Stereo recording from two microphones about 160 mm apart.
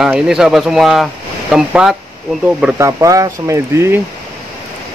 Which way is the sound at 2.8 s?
20° right (ahead or behind).